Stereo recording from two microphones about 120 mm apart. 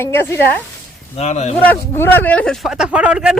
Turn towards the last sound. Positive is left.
turn(degrees=-5)  # may be behind; listen again after turning